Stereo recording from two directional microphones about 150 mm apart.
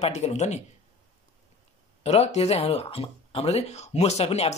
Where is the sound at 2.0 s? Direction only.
45° left (ahead or behind).